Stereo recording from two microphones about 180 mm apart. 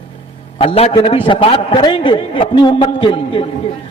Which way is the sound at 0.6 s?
30° left (ahead or behind).